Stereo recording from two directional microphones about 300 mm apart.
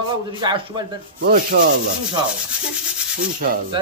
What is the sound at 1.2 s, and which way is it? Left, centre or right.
Rub, right.